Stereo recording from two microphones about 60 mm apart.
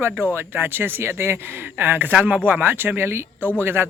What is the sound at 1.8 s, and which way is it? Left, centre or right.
Speech, right.